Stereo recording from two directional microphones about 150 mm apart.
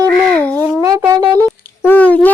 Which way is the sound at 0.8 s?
20° right (ahead or behind).